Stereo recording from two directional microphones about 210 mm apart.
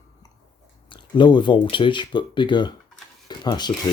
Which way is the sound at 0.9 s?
20° left (ahead or behind).